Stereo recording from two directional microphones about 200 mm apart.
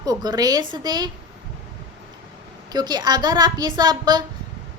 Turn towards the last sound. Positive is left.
turn(degrees=-20)  # may be behind; listen again after turning